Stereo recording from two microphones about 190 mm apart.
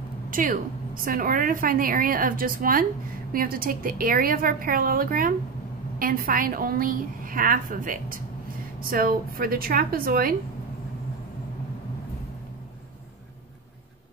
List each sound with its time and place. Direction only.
0.3 s a woman's voice: 45° right (ahead or behind)